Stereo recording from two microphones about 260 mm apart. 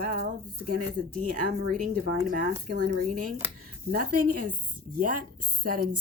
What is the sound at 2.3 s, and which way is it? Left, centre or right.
Speech, right.